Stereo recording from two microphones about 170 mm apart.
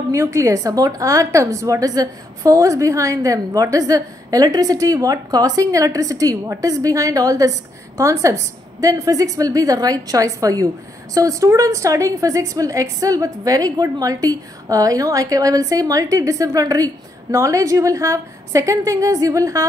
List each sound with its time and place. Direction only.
0.1 s a woman's voice: 15° right (ahead or behind)